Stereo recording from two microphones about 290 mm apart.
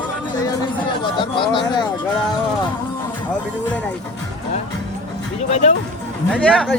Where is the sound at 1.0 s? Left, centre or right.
Centre.